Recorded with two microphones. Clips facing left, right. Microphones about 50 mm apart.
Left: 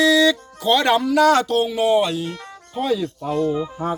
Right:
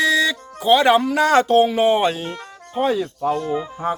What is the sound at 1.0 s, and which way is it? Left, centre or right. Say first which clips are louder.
Speech: left 1 dB; right.